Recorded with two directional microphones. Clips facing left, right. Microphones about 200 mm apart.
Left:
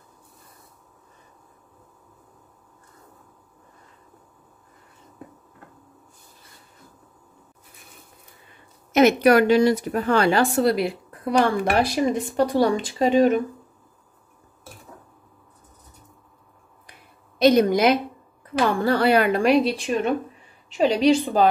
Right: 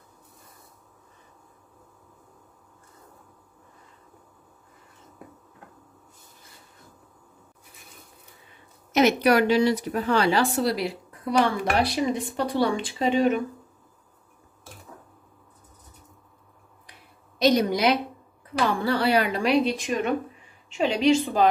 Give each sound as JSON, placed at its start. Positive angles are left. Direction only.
{"t": 8.9, "sound": "speech", "side_deg": 50}
{"t": 17.4, "sound": "speech", "side_deg": 55}
{"t": 20.7, "sound": "a woman's voice", "side_deg": 40}